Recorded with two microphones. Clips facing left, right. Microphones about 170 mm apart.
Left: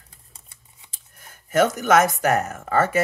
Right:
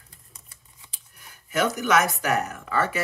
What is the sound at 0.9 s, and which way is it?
Speech, 45° left (ahead or behind).